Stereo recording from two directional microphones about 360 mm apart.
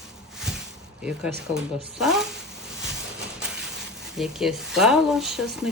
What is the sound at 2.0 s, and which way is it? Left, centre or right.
Speech, centre.